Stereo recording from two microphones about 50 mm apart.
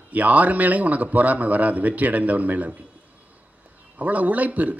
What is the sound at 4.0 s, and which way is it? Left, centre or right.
Speech, right.